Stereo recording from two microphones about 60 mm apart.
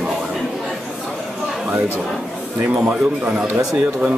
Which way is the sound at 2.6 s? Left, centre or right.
Right.